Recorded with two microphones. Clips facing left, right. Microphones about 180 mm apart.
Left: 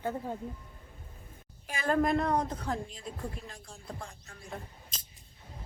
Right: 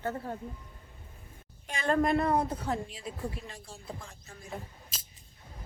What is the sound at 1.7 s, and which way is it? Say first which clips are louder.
A woman's voice: right 1 dB; 5° left (ahead or behind).